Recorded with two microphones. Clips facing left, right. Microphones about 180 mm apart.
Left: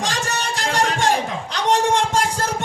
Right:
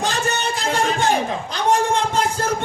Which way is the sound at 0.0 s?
90° left.